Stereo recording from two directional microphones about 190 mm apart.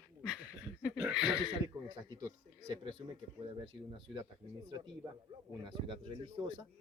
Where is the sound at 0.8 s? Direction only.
5° right (ahead or behind).